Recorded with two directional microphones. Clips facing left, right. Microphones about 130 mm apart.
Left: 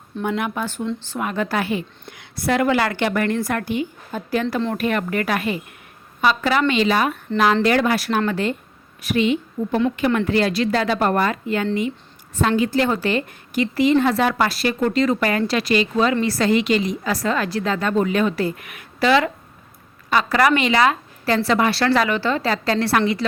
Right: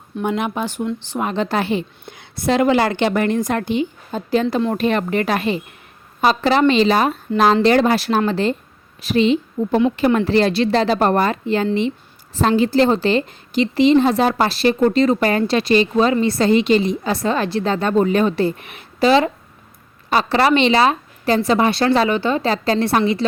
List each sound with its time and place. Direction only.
0.2 s a woman's voice: 20° right (ahead or behind)
1.2 s a woman's voice: 25° right (ahead or behind)